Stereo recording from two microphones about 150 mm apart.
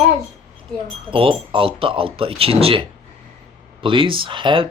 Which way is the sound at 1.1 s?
35° right (ahead or behind).